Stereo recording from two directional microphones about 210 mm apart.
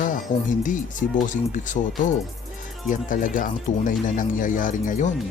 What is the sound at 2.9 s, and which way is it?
Speech, 40° left (ahead or behind).